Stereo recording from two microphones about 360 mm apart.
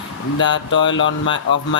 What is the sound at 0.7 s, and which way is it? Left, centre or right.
Speech, left.